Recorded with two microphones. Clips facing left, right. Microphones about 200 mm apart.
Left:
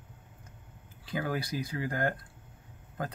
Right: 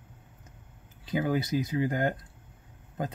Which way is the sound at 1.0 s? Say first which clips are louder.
Right 5 dB; 20° right (ahead or behind).